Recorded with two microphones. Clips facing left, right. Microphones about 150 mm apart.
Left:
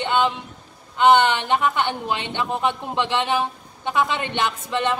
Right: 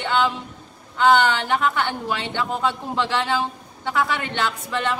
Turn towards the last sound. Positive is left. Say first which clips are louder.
# left 1 dB
turn(degrees=20)  # may be behind; listen again after turning